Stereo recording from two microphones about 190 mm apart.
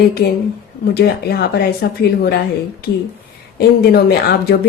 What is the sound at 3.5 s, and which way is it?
Speech, 55° left (ahead or behind).